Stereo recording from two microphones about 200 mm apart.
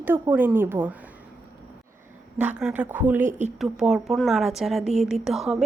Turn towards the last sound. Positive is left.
turn(degrees=0)  # may be behind; listen again after turning